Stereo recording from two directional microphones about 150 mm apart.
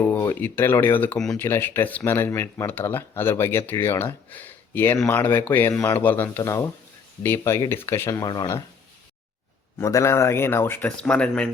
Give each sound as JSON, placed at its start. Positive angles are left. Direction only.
{"t": 0.0, "sound": "a sound", "side_deg": 15}
{"t": 0.3, "sound": "speech", "side_deg": 15}
{"t": 9.7, "sound": "speech", "side_deg": 20}